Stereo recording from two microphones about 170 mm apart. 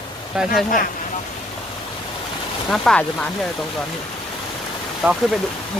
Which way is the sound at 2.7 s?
5° left (ahead or behind).